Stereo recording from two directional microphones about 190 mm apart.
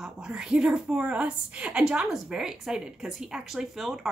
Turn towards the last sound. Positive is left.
turn(degrees=0)  # may be behind; listen again after turning